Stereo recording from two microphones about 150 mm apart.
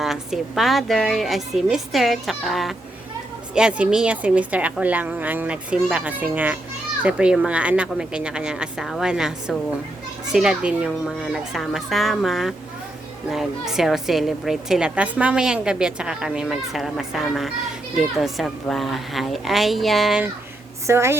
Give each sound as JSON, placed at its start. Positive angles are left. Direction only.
{"t": 0.0, "sound": "a woman's voice", "side_deg": 0}
{"t": 20.8, "sound": "a woman's voice", "side_deg": -15}